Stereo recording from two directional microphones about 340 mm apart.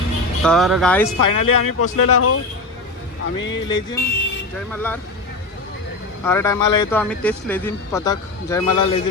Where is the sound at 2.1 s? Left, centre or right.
Left.